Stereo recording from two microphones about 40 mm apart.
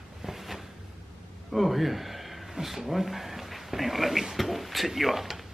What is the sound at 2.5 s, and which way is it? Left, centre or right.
Speech, centre.